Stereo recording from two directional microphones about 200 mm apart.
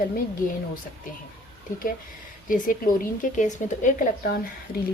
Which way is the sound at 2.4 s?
40° left (ahead or behind).